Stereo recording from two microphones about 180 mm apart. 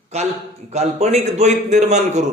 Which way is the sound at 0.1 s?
35° right (ahead or behind).